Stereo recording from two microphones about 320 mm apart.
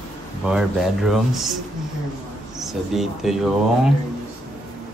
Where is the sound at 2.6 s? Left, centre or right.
Centre.